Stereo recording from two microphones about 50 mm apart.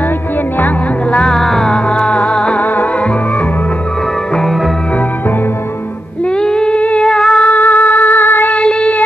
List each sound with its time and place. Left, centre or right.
1.3 s music: centre
1.7 s music: centre
6.4 s humming: centre
7.1 s music: centre
7.4 s music: left
8.5 s child singing: left